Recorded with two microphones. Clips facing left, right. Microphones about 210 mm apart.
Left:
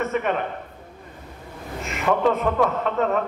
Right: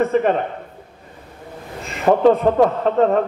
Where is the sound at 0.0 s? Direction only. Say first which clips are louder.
Right 7 dB; 35° right (ahead or behind).